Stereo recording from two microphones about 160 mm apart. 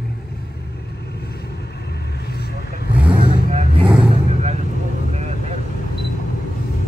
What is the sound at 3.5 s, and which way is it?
Vehicle, 35° right (ahead or behind).